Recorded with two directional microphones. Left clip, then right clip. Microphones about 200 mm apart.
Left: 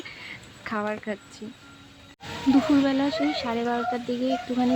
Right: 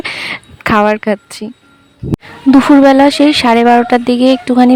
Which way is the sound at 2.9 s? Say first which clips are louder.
Right 18 dB; 55° right (ahead or behind).